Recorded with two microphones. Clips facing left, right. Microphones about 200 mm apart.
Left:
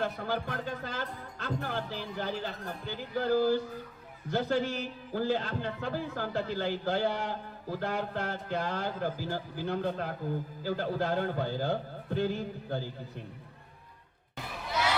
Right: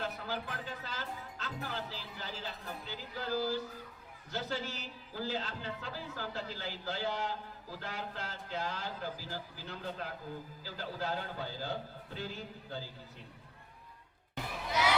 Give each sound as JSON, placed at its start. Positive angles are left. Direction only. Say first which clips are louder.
{"t": 0.0, "sound": "a man's voice", "louder": "left 6 dB", "side_deg": 55}